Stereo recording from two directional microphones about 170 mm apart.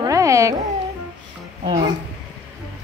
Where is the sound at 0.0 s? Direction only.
20° right (ahead or behind).